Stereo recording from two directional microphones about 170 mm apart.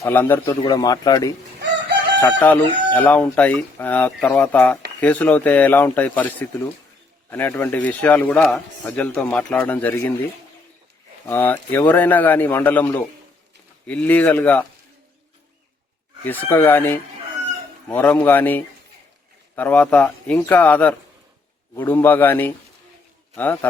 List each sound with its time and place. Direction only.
0.0 s a man's voice: 10° left (ahead or behind)
0.6 s speech: 25° left (ahead or behind)
2.4 s a man's voice: 10° left (ahead or behind)
11.3 s a man's voice: 10° left (ahead or behind)
16.2 s a man's voice: 10° left (ahead or behind)